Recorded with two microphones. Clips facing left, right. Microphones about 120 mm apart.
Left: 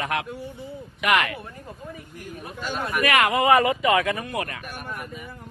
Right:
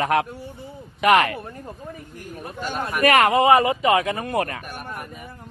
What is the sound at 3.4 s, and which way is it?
Speech, 25° right (ahead or behind).